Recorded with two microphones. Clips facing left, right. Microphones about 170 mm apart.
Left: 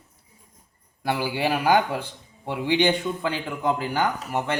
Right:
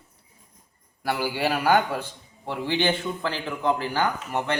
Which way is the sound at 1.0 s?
15° left (ahead or behind).